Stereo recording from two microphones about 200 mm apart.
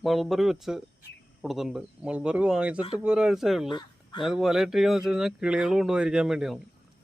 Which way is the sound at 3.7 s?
25° left (ahead or behind).